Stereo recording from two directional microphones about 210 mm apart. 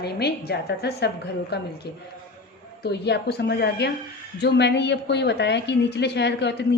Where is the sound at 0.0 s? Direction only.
50° left (ahead or behind).